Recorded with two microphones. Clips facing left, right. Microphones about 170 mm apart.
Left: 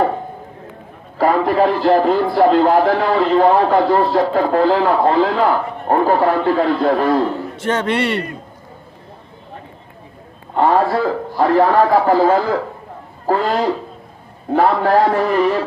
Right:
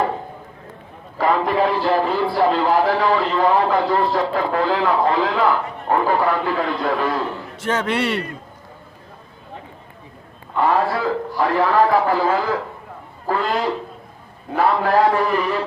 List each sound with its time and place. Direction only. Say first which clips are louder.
1.2 s speech: left 4 dB; 45° left (ahead or behind)
7.6 s a man's voice: left 2 dB; 5° right (ahead or behind)
10.5 s a man's voice: left 4 dB; 40° left (ahead or behind)
14.5 s a man's voice: left 3 dB; 40° left (ahead or behind)